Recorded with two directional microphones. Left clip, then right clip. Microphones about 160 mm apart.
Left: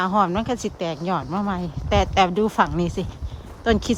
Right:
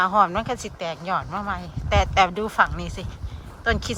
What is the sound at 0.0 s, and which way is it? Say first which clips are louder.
Speech: right 1 dB; 25° left (ahead or behind).